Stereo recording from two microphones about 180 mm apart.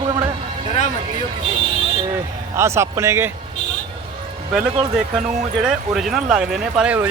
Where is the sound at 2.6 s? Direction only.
15° right (ahead or behind).